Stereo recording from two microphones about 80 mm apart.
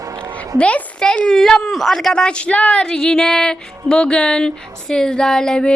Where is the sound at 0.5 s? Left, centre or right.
Centre.